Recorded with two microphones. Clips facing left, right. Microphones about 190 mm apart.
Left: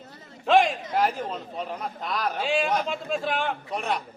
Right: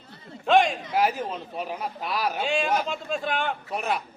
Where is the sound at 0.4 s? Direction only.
Centre (ahead or behind).